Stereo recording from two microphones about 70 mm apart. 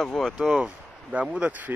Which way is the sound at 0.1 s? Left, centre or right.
Centre.